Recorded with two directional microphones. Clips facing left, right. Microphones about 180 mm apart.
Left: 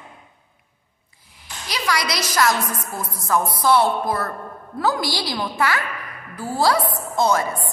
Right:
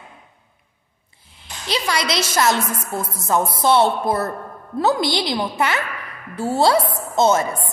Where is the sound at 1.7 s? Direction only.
25° right (ahead or behind).